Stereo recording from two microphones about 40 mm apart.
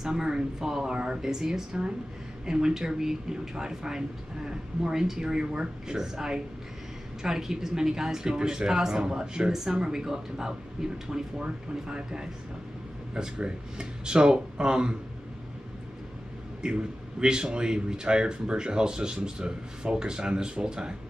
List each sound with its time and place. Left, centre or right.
0.0 s speech: centre
0.9 s speech: right
1.2 s speech: centre
16.6 s speech: right